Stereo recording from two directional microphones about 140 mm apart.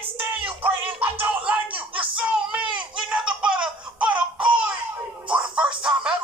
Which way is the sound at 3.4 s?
5° right (ahead or behind).